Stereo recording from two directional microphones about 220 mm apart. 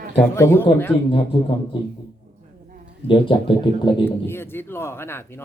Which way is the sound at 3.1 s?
25° left (ahead or behind).